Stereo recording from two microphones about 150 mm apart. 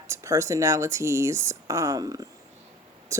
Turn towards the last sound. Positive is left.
turn(degrees=-20)  # may be behind; listen again after turning